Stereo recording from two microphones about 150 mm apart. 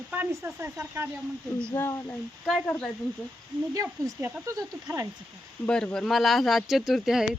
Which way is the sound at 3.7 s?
20° right (ahead or behind).